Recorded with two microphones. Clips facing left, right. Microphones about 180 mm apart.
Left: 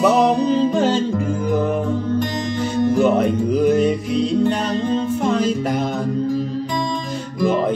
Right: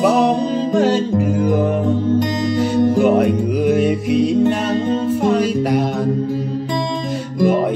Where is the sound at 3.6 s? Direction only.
10° right (ahead or behind).